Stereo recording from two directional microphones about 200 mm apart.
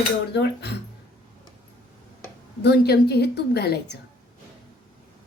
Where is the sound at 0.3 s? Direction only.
55° left (ahead or behind).